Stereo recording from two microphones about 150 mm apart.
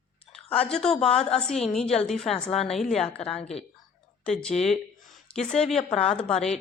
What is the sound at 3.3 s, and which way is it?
Speech, 45° left (ahead or behind).